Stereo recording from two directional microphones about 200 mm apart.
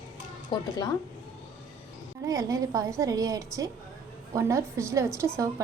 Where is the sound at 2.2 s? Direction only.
15° right (ahead or behind).